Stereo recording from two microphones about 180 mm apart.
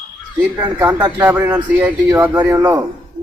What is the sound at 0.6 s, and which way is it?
A man's voice, 10° right (ahead or behind).